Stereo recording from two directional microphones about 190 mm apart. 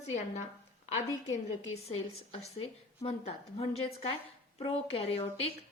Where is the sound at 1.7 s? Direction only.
30° left (ahead or behind).